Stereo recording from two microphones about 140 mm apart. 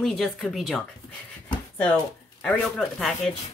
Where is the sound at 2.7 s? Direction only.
Centre (ahead or behind).